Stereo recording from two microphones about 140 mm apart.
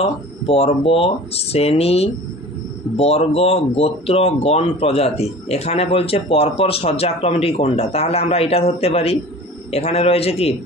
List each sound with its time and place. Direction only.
0.0 s speech: 45° left (ahead or behind)